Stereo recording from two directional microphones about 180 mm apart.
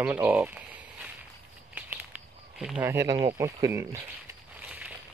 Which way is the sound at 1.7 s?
10° right (ahead or behind).